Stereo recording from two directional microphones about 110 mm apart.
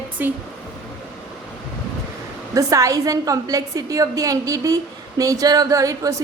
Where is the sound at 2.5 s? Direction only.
30° right (ahead or behind).